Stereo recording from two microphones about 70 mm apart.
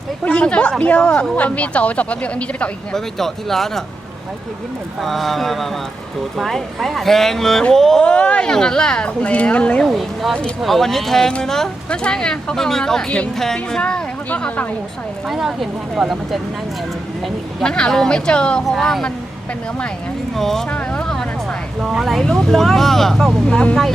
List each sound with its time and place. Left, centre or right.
0.3 s speech: centre
2.9 s speech: centre
4.9 s speech: centre
9.8 s speech: centre
15.3 s speech: centre
17.6 s speech: centre
20.3 s speech: centre
20.7 s a sound: centre
21.8 s speech: centre
22.0 s speech: centre